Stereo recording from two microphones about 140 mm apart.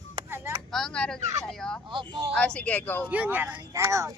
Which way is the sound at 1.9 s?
35° right (ahead or behind).